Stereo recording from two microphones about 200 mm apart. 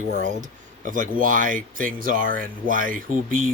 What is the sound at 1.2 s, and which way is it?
Speech, 40° right (ahead or behind).